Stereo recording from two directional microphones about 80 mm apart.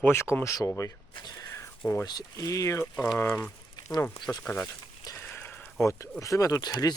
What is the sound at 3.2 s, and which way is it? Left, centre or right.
Speech, left.